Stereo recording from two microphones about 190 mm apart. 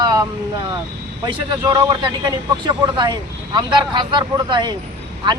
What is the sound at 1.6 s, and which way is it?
Speech, 20° right (ahead or behind).